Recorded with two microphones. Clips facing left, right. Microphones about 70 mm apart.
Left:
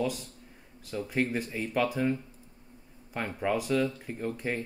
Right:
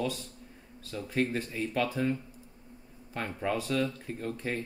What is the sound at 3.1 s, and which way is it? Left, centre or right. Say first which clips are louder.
Speech: left 2 dB; centre.